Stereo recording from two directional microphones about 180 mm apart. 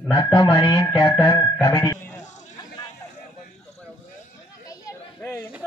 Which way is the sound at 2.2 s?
40° left (ahead or behind).